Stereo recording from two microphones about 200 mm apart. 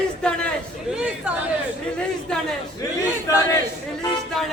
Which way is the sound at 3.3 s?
15° left (ahead or behind).